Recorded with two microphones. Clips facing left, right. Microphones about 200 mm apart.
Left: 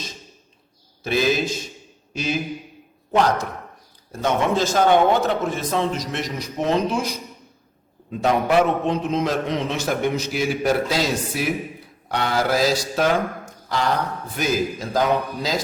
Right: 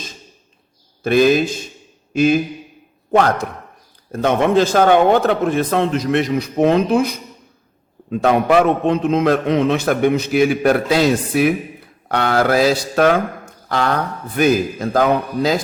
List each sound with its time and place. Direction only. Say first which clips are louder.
1.0 s a man's voice: right 7 dB; 55° right (ahead or behind)